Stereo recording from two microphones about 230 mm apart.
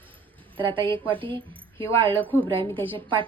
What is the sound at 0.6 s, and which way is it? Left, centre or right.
A woman's voice, right.